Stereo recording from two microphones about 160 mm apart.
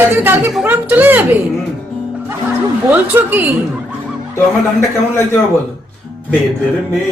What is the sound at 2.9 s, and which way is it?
Speech, 10° right (ahead or behind).